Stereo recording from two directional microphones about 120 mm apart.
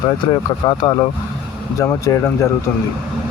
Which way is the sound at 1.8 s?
25° left (ahead or behind).